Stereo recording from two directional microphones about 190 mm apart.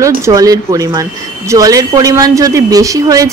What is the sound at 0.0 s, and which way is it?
A woman's voice, 15° right (ahead or behind).